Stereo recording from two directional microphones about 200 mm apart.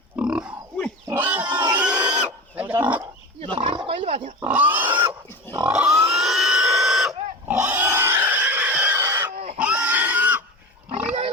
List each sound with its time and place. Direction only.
0.2 s pig: 5° right (ahead or behind)
3.5 s roaring cats: 25° right (ahead or behind)
4.4 s pig: 10° right (ahead or behind)